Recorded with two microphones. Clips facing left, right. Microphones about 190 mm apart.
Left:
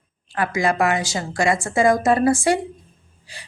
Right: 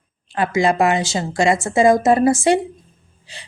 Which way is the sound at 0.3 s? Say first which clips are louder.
Right 3 dB; 25° right (ahead or behind).